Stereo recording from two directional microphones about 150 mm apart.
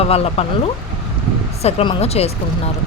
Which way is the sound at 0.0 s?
40° left (ahead or behind).